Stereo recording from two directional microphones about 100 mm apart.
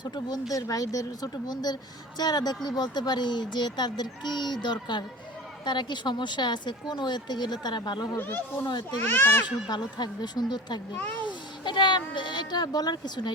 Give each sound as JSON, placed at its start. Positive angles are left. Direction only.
{"t": 0.0, "sound": "speech", "side_deg": 45}
{"t": 8.2, "sound": "a child's voice", "side_deg": 20}
{"t": 8.6, "sound": "speech", "side_deg": 45}
{"t": 9.0, "sound": "a child's voice", "side_deg": 20}
{"t": 9.6, "sound": "speech", "side_deg": 45}